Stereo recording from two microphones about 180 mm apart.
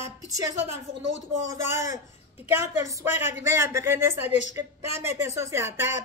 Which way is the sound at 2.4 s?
15° right (ahead or behind).